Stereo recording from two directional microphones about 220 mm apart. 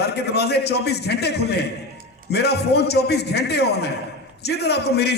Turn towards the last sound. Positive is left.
turn(degrees=50)  # may be behind; listen again after turning